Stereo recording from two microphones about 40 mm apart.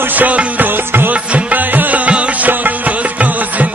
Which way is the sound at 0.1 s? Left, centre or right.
Right.